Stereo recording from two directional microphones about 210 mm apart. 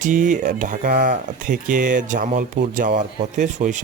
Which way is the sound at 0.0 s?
35° right (ahead or behind).